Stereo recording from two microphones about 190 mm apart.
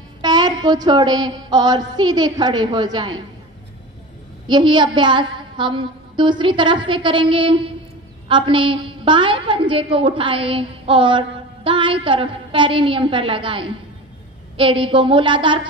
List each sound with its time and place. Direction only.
0.2 s a woman's voice: 20° right (ahead or behind)
4.5 s a woman's voice: 25° right (ahead or behind)